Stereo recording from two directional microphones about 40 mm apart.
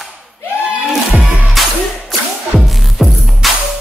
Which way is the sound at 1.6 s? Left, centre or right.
Centre.